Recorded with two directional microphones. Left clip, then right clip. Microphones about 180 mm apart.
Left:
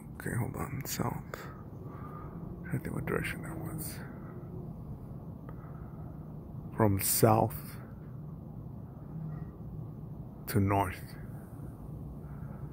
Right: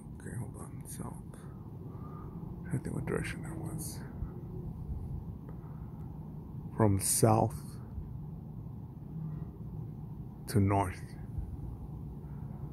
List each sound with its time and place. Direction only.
0.2 s speech: 25° left (ahead or behind)
2.7 s speech: centre (ahead or behind)
6.8 s speech: centre (ahead or behind)
10.5 s speech: centre (ahead or behind)